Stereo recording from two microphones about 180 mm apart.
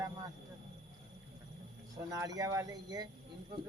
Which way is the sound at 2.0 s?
20° right (ahead or behind).